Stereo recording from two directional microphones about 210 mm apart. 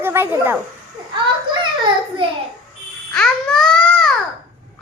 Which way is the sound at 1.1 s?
20° right (ahead or behind).